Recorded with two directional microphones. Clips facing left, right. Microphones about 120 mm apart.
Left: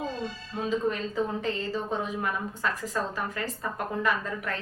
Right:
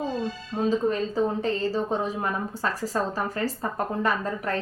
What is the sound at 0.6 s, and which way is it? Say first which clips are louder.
A woman's voice: right 4 dB; 35° right (ahead or behind).